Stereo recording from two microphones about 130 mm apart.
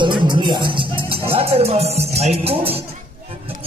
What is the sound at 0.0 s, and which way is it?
Music, 35° right (ahead or behind).